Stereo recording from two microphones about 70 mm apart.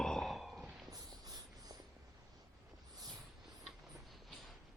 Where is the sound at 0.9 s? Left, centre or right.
Right.